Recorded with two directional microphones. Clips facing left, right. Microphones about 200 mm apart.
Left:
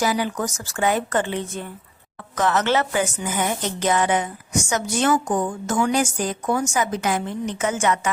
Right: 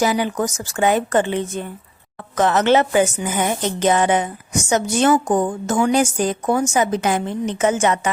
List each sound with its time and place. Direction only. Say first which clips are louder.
0.0 s a woman's voice: right 4 dB; 20° right (ahead or behind)